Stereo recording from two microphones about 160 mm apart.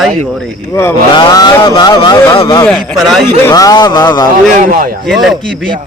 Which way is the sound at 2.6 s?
Centre (ahead or behind).